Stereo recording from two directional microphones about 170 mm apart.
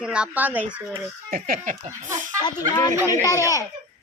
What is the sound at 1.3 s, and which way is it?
Speech, 50° right (ahead or behind).